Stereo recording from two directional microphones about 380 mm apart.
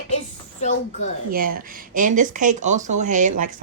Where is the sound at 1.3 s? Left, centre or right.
Right.